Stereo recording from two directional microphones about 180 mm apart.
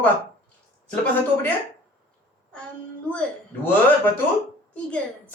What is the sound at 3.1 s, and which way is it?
A woman's voice, 10° left (ahead or behind).